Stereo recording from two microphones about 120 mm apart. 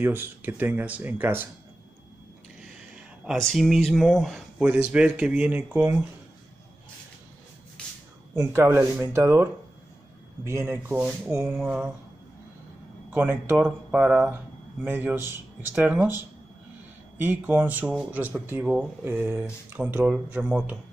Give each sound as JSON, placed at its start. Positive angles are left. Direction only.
{"t": 0.0, "sound": "speech", "side_deg": -15}
{"t": 3.3, "sound": "speech", "side_deg": 0}
{"t": 8.6, "sound": "speech", "side_deg": -20}
{"t": 13.1, "sound": "speech", "side_deg": -15}